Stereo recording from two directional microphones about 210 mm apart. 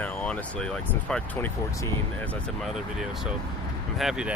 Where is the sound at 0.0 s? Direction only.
5° left (ahead or behind).